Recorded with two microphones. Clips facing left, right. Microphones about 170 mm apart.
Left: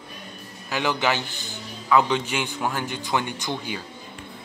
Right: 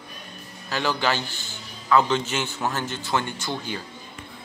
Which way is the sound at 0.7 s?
15° left (ahead or behind).